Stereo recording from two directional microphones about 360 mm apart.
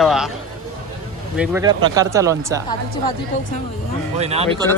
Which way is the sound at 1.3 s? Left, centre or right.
Centre.